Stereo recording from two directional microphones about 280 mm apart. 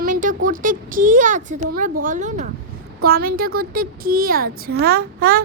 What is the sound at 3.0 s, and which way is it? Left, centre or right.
Speech, right.